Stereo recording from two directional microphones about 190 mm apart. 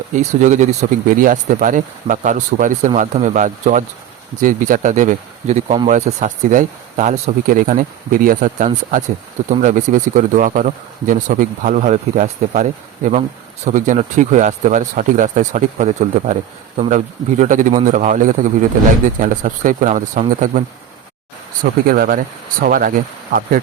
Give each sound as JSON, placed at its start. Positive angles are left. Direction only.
{"t": 0.2, "sound": "speech", "side_deg": -40}
{"t": 13.7, "sound": "speech", "side_deg": -40}